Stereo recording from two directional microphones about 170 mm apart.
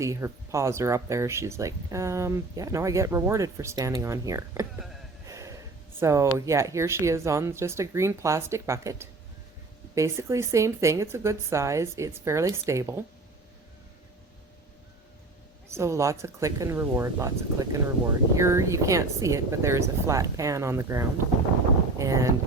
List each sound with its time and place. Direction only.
0.0 s speech: 15° right (ahead or behind)
15.7 s speech: 15° right (ahead or behind)